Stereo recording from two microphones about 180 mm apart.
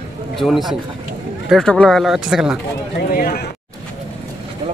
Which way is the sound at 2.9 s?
60° left (ahead or behind).